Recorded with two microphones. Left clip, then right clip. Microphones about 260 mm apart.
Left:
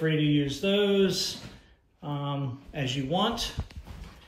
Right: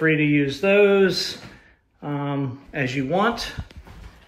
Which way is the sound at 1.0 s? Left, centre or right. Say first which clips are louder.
Right 6 dB; centre.